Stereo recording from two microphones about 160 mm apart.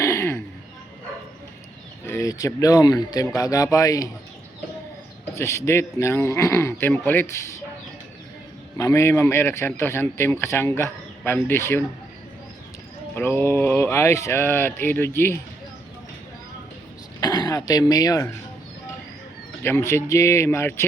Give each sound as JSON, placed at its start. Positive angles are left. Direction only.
{"t": 0.0, "sound": "a sound", "side_deg": 20}
{"t": 2.0, "sound": "speech", "side_deg": 20}
{"t": 5.3, "sound": "speech", "side_deg": 15}
{"t": 8.8, "sound": "speech", "side_deg": 20}
{"t": 13.1, "sound": "speech", "side_deg": 15}
{"t": 17.2, "sound": "speech", "side_deg": 25}
{"t": 19.6, "sound": "speech", "side_deg": 15}